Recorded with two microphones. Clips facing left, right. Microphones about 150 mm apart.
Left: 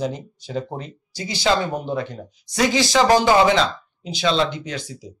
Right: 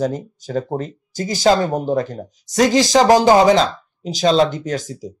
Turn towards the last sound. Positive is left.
turn(degrees=-45)  # may be behind; listen again after turning